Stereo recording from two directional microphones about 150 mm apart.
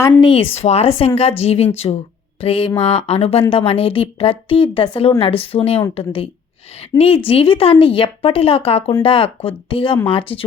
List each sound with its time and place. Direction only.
0.2 s speech: 35° left (ahead or behind)
6.9 s a woman's voice: 25° left (ahead or behind)
7.3 s speech: 35° left (ahead or behind)